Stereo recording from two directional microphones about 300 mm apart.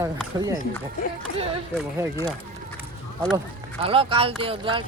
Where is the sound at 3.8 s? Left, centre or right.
Centre.